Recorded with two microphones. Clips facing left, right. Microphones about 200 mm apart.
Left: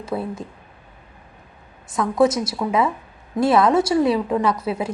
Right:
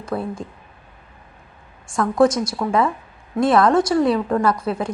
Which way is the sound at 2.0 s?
Centre (ahead or behind).